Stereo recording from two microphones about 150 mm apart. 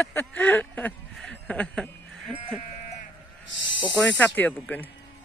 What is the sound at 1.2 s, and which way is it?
Sheep, 5° left (ahead or behind).